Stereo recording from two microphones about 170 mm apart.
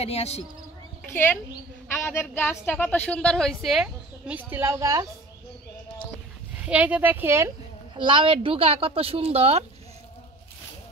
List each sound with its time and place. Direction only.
0.0 s a man's voice: 40° left (ahead or behind)
1.0 s a woman's voice: 10° left (ahead or behind); by 5.0 s 20° right (ahead or behind)
6.6 s speech: 10° right (ahead or behind)
7.9 s speech: 30° right (ahead or behind)